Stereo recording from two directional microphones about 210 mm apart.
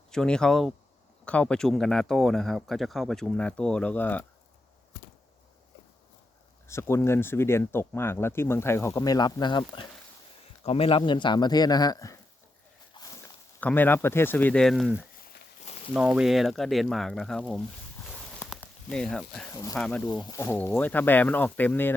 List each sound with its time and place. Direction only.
0.1 s speech: 5° left (ahead or behind)
6.7 s speech: 10° left (ahead or behind)
12.9 s walk: 20° left (ahead or behind)
13.6 s speech: 10° left (ahead or behind)
18.3 s a sound: 5° left (ahead or behind)
19.7 s speech: 5° left (ahead or behind)
20.1 s speech: 15° left (ahead or behind)